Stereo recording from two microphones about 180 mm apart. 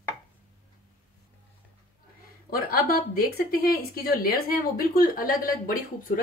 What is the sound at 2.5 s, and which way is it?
Speech, 55° left (ahead or behind).